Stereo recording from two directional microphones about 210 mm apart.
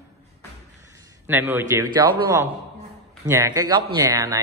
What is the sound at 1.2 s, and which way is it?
A man's voice, 10° right (ahead or behind).